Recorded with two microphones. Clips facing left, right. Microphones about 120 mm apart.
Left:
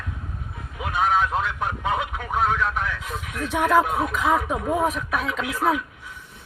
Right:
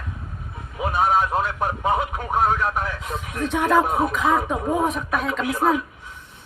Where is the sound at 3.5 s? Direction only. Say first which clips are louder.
Even; centre (ahead or behind).